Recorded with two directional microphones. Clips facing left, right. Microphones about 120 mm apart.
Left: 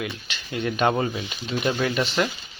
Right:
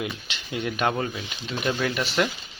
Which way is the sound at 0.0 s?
20° right (ahead or behind).